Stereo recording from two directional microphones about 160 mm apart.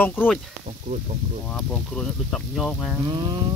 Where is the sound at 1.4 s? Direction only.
5° left (ahead or behind).